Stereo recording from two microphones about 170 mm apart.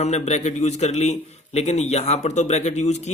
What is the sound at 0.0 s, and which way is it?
A man's voice, 40° left (ahead or behind).